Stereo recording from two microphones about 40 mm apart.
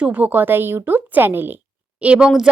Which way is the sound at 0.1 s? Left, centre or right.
Right.